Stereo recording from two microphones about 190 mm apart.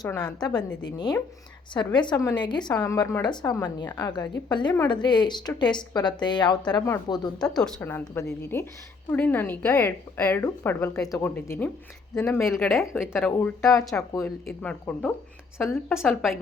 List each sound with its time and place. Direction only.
0.0 s a woman's voice: 20° left (ahead or behind)
7.5 s a woman's voice: 5° left (ahead or behind)